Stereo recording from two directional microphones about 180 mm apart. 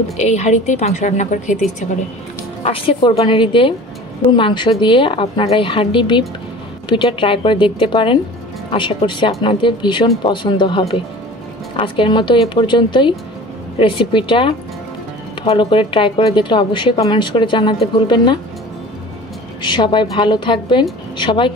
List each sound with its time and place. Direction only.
0.2 s a woman's voice: 40° left (ahead or behind)
2.6 s speech: 30° left (ahead or behind)
19.6 s speech: 25° left (ahead or behind)